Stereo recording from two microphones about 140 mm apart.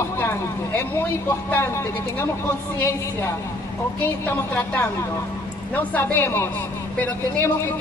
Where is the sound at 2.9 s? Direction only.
20° left (ahead or behind).